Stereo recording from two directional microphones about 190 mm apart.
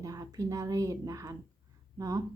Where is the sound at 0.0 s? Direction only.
20° right (ahead or behind).